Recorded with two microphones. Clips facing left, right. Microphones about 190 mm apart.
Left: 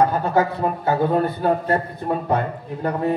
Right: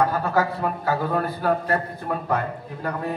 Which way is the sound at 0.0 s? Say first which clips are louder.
Left 3 dB; 25° left (ahead or behind).